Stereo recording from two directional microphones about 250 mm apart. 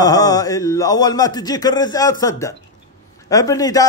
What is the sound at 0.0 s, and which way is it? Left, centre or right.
A man's voice, centre.